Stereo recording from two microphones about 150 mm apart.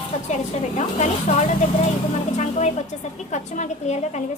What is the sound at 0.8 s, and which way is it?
A child's voice, 50° left (ahead or behind).